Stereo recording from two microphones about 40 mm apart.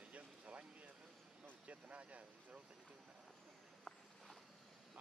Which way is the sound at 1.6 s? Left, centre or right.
Right.